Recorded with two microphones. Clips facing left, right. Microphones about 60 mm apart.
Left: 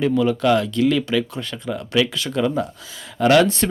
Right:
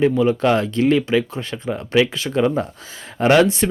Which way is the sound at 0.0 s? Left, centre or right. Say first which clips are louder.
Right 2 dB; right.